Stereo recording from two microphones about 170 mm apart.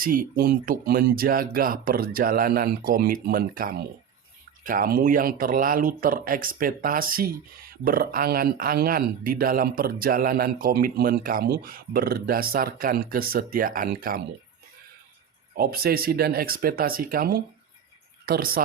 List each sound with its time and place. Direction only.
0.0 s speech: 55° right (ahead or behind)
15.5 s speech: 60° right (ahead or behind)